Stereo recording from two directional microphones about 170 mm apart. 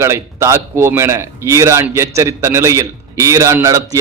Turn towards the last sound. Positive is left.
turn(degrees=-15)  # may be behind; listen again after turning